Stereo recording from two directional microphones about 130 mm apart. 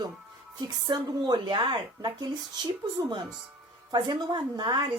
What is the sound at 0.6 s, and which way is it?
A woman's voice, 30° right (ahead or behind).